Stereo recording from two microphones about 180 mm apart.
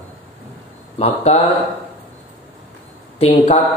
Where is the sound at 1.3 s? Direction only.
35° left (ahead or behind).